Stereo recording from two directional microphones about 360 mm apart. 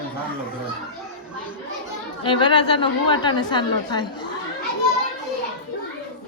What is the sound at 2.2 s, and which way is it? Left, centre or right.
A woman's voice, centre.